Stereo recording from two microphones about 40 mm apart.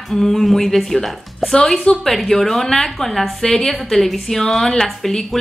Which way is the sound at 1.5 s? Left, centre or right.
Centre.